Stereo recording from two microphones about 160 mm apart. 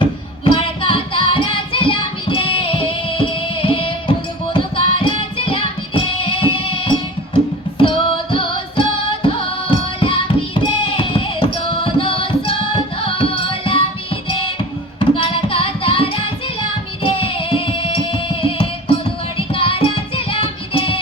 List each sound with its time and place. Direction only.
0.0 s music: 35° left (ahead or behind)